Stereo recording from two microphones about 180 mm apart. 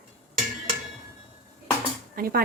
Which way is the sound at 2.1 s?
55° right (ahead or behind).